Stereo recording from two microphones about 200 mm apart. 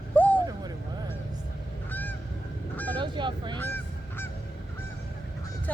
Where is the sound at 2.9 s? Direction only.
25° right (ahead or behind).